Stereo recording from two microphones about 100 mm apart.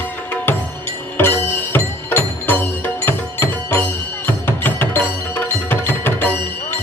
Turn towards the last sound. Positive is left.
turn(degrees=20)  # may be behind; listen again after turning